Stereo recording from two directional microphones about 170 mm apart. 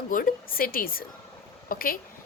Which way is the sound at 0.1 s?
55° left (ahead or behind).